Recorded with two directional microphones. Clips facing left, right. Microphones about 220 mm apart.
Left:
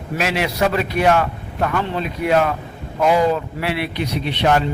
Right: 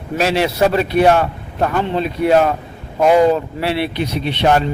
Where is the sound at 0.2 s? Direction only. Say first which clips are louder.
Right 5 dB; 30° right (ahead or behind).